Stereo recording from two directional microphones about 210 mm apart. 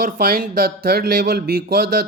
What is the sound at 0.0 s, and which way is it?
Speech, 45° right (ahead or behind).